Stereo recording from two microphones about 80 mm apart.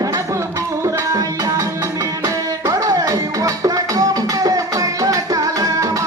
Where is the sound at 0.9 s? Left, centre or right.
Right.